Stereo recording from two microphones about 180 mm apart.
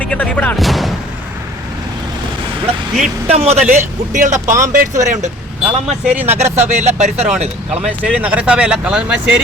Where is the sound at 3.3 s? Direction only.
35° right (ahead or behind).